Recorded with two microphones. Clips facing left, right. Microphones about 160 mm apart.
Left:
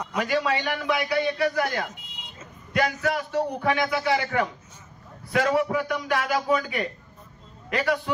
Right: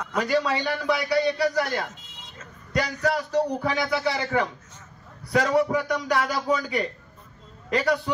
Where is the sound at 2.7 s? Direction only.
35° right (ahead or behind).